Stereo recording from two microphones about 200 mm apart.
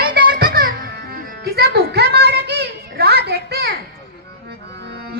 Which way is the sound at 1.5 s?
55° right (ahead or behind).